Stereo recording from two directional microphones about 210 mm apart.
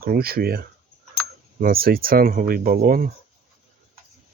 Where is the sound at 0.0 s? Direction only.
45° right (ahead or behind).